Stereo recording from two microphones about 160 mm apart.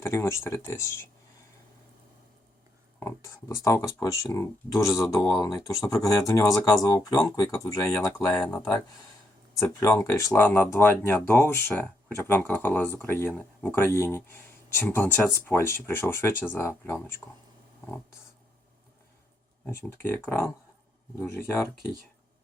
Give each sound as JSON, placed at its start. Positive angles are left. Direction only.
{"t": 0.0, "sound": "speech", "side_deg": 15}
{"t": 3.0, "sound": "speech", "side_deg": 20}
{"t": 9.6, "sound": "speech", "side_deg": 20}
{"t": 19.6, "sound": "speech", "side_deg": 15}